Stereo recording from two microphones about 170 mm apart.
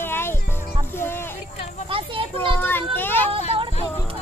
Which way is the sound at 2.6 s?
10° left (ahead or behind).